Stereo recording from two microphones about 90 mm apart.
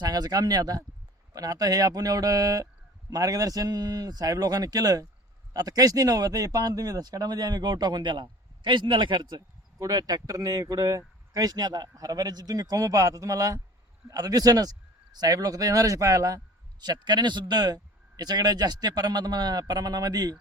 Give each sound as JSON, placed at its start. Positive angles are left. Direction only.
{"t": 0.0, "sound": "speech", "side_deg": -50}
{"t": 9.7, "sound": "speech", "side_deg": -40}
{"t": 16.8, "sound": "speech", "side_deg": -50}